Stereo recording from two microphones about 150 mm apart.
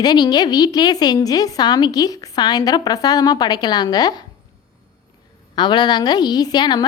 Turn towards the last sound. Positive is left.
turn(degrees=30)  # may be behind; listen again after turning